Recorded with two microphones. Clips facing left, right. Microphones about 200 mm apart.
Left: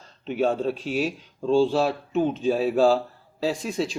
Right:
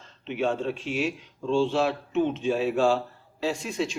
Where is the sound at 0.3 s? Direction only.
40° left (ahead or behind).